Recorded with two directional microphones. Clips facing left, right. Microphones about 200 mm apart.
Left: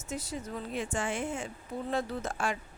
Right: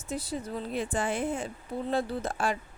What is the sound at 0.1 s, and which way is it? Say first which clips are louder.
A woman's voice: right 3 dB; 35° right (ahead or behind).